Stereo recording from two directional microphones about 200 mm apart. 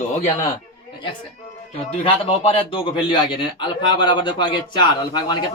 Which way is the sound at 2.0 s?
25° left (ahead or behind).